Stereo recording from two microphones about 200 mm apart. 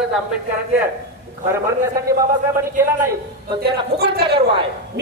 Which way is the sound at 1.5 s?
15° right (ahead or behind).